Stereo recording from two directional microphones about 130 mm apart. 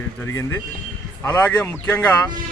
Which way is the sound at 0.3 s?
20° left (ahead or behind).